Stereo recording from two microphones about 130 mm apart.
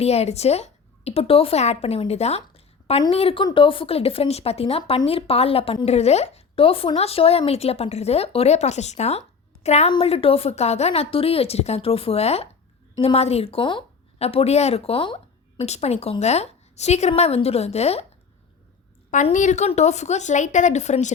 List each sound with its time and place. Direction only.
0.0 s a woman's voice: 55° left (ahead or behind)
9.9 s a woman's voice: 45° left (ahead or behind)
15.6 s a woman's voice: 55° left (ahead or behind)
19.1 s a woman's voice: 70° left (ahead or behind)